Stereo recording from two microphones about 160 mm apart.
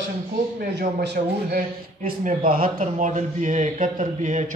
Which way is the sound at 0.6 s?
80° right.